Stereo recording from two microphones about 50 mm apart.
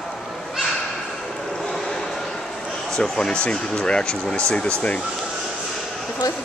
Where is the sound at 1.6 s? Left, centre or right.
Centre.